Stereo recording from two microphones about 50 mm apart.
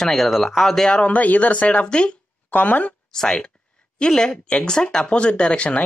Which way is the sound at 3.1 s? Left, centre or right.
Centre.